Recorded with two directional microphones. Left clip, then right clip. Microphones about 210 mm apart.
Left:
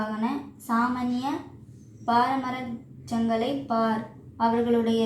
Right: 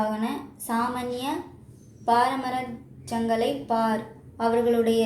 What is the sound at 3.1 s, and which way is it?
A woman's voice, 25° right (ahead or behind).